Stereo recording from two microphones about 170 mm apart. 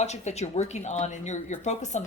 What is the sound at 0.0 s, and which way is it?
A woman's voice, 40° left (ahead or behind).